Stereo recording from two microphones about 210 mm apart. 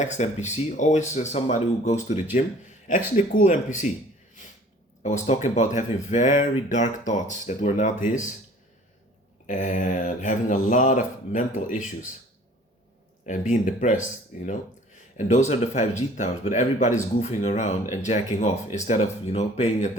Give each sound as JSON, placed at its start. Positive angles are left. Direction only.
{"t": 0.0, "sound": "mantra", "side_deg": 35}
{"t": 2.3, "sound": "a man's voice", "side_deg": 35}
{"t": 3.3, "sound": "mantra", "side_deg": 35}
{"t": 5.0, "sound": "mantra", "side_deg": 30}
{"t": 9.5, "sound": "mantra", "side_deg": 35}
{"t": 13.2, "sound": "mantra", "side_deg": 35}